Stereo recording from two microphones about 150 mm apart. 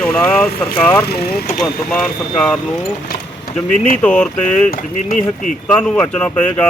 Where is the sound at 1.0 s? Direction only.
90° left.